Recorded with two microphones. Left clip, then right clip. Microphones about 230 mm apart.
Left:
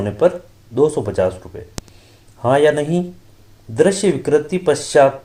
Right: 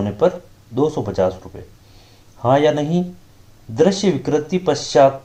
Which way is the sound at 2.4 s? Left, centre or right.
Left.